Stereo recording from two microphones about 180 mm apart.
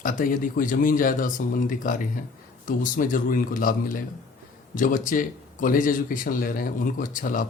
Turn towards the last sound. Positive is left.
turn(degrees=50)  # may be behind; listen again after turning